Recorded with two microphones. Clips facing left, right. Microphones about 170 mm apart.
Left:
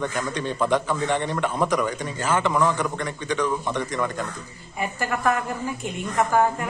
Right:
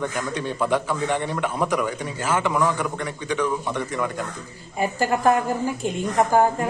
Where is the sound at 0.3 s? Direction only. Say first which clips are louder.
Even; 10° right (ahead or behind).